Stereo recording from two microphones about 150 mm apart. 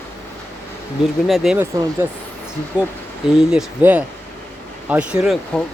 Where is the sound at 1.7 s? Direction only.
25° right (ahead or behind).